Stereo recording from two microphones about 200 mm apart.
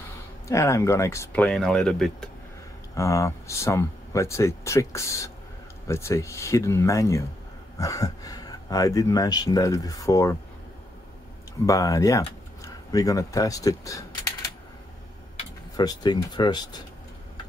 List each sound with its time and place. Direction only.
0.5 s speech: 15° left (ahead or behind)
2.9 s speech: 15° left (ahead or behind)
11.6 s speech: 15° left (ahead or behind)
15.7 s speech: 20° left (ahead or behind)